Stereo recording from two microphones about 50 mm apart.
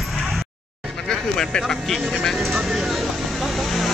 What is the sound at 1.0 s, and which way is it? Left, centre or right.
Speech, centre.